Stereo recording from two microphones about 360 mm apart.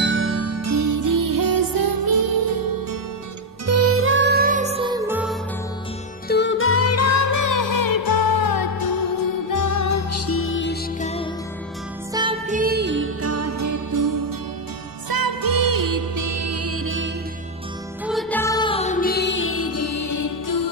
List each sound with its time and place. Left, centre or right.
0.0 s music: right
3.6 s music: right; by 5.4 s centre
6.2 s music: left
12.1 s music: centre; by 14.2 s right
15.0 s music: right
18.0 s music: centre; by 20.7 s left